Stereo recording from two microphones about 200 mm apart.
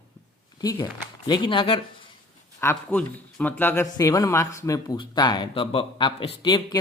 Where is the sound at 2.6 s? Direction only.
10° left (ahead or behind).